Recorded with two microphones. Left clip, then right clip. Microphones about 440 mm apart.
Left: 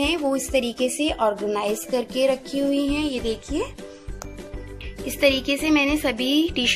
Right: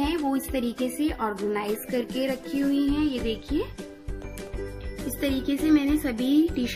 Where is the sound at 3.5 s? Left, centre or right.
Centre.